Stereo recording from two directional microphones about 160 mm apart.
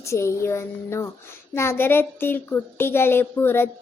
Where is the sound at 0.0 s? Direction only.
15° left (ahead or behind).